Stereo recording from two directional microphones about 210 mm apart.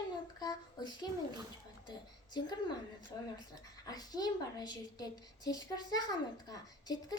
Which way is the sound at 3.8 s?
20° left (ahead or behind).